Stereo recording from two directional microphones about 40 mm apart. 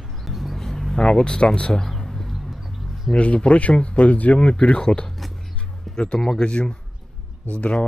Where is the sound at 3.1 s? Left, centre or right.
Left.